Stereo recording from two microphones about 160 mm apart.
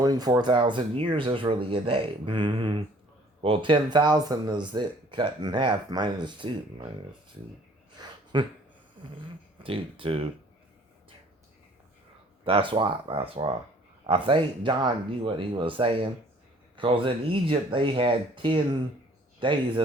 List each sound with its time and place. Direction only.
0.0 s speech: 25° right (ahead or behind)
7.9 s a sound: 30° right (ahead or behind)
9.6 s speech: 35° right (ahead or behind)
12.5 s speech: 35° right (ahead or behind)